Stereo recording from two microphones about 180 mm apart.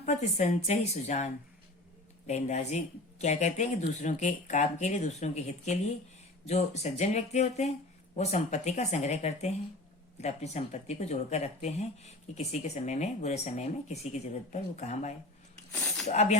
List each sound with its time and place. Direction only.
0.0 s speech: 40° left (ahead or behind)
15.7 s a sound: 5° left (ahead or behind)
16.0 s speech: 35° left (ahead or behind)